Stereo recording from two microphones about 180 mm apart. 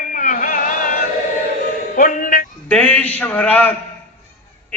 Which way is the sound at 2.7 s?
10° left (ahead or behind).